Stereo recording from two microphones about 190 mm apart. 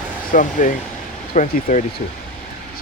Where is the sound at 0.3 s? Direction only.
40° left (ahead or behind).